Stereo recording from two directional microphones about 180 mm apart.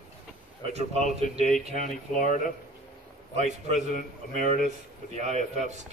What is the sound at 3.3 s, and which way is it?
Speech, 40° right (ahead or behind).